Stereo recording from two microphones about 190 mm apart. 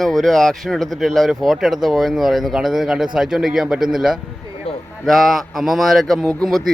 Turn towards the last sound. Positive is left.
turn(degrees=0)  # may be behind; listen again after turning